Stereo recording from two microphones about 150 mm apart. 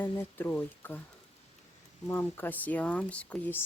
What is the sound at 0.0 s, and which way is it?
Speech, 15° left (ahead or behind).